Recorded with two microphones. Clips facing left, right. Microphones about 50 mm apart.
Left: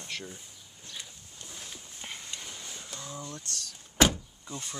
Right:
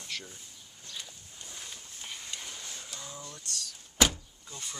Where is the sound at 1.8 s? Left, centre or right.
Centre.